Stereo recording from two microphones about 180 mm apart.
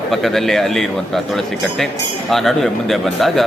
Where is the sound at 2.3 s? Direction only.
Centre (ahead or behind).